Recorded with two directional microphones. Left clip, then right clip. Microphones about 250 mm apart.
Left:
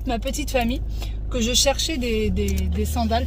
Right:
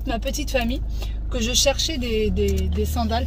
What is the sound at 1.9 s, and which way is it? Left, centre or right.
Speech, centre.